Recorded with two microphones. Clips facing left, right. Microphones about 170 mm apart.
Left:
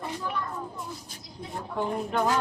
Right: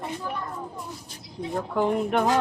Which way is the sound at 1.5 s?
80° right.